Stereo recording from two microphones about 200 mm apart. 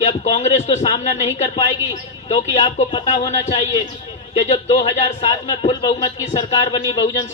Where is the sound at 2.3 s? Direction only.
30° left (ahead or behind).